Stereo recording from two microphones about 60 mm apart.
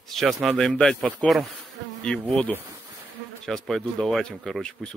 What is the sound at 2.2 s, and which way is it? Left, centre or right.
Speech, left.